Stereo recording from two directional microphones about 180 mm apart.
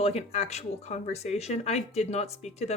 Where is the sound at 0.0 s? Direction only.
35° left (ahead or behind).